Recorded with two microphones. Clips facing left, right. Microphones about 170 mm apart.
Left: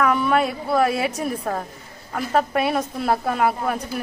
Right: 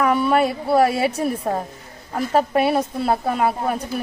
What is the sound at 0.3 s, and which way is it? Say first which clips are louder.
Speech: right 2 dB; 5° right (ahead or behind).